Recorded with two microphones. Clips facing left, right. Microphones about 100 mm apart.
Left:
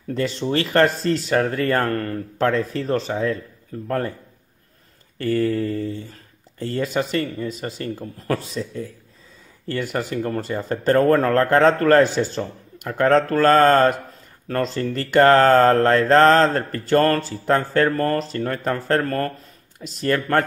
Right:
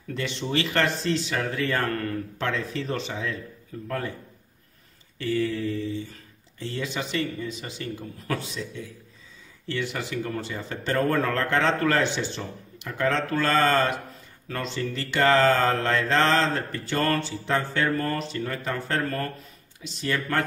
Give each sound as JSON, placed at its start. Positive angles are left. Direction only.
{"t": 0.1, "sound": "speech", "side_deg": 40}
{"t": 5.2, "sound": "speech", "side_deg": 45}